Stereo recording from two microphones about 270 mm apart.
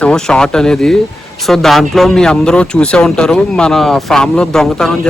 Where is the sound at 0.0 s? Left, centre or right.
Centre.